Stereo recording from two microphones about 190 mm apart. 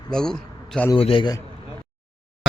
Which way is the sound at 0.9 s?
30° left (ahead or behind).